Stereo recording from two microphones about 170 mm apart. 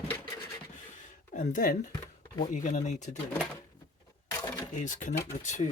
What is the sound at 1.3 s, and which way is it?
Speech, 50° left (ahead or behind).